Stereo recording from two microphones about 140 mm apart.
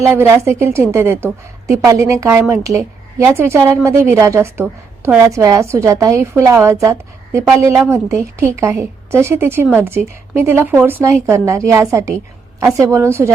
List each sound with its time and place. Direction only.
0.0 s a woman's voice: 15° right (ahead or behind)